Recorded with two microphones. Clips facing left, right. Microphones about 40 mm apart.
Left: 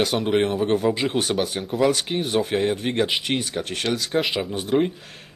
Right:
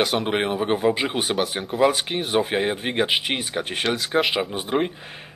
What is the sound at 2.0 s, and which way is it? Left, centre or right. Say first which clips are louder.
Speech: left 1 dB; centre.